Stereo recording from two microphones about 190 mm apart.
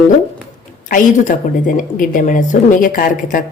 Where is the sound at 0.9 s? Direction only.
45° left (ahead or behind).